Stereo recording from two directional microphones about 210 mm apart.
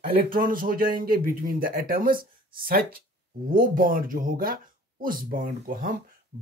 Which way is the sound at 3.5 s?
40° right (ahead or behind).